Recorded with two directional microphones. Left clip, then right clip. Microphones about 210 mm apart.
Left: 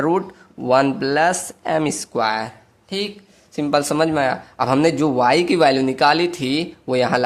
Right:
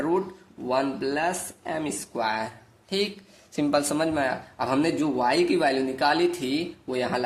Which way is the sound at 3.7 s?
25° left (ahead or behind).